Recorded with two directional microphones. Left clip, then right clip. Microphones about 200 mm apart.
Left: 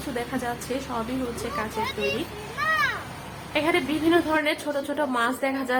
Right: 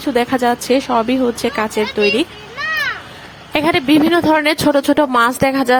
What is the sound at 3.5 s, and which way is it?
Speech, 55° right (ahead or behind).